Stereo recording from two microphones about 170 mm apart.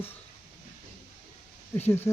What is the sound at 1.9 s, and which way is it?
Speech, 15° left (ahead or behind).